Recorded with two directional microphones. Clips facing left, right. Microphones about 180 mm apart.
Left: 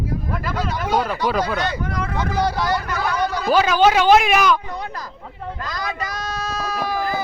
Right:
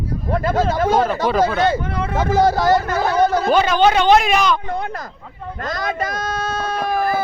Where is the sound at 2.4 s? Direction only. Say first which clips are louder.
Right 7 dB; 45° right (ahead or behind).